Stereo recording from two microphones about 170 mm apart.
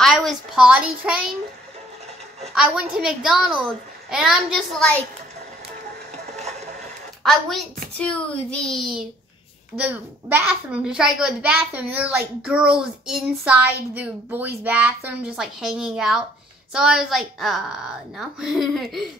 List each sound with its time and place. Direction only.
0.0 s a woman's voice: centre (ahead or behind)
2.5 s a child's voice: 5° right (ahead or behind)
6.1 s a sound: 40° right (ahead or behind)
7.2 s a child's voice: centre (ahead or behind)